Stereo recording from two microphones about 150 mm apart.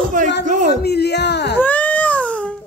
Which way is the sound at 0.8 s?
90° left.